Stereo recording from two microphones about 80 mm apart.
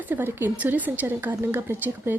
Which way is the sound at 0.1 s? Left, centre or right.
Right.